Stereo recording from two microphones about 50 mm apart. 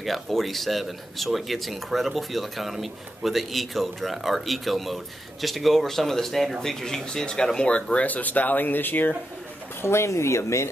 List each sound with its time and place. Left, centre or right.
0.0 s speech: centre; by 9.1 s left
9.8 s speech: left